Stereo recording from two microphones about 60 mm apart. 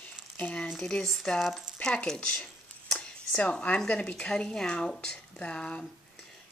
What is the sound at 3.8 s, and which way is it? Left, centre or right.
Speech, centre.